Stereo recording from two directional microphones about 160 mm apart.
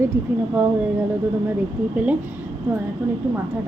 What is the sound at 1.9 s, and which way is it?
Speech, 10° right (ahead or behind).